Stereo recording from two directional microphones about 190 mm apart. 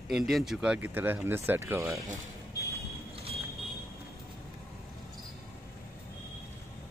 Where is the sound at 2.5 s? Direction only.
15° left (ahead or behind).